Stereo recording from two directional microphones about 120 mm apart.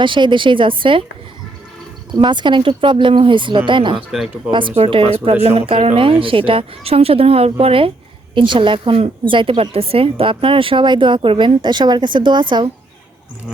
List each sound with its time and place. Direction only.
0.0 s speech: 40° right (ahead or behind)
2.1 s speech: 40° right (ahead or behind)
4.1 s speech: 5° right (ahead or behind)
4.9 s speech: 50° right (ahead or behind)